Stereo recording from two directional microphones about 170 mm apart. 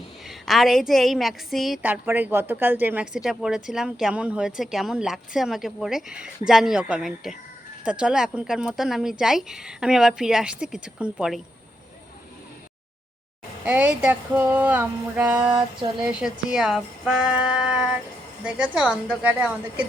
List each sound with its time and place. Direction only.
0.3 s a woman's voice: centre (ahead or behind)
13.7 s speech: 5° right (ahead or behind)
15.4 s a sound: 30° right (ahead or behind)
16.2 s a woman's voice: 5° right (ahead or behind)